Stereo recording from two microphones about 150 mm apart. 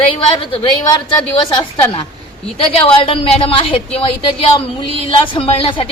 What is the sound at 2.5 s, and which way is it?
A woman's voice, 35° left (ahead or behind).